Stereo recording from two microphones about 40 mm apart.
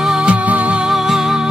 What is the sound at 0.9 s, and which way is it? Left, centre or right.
Music, centre.